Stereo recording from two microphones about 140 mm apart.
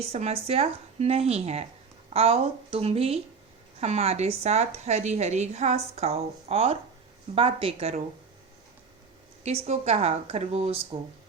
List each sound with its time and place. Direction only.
0.0 s speech: 50° right (ahead or behind)
9.4 s speech: 50° right (ahead or behind)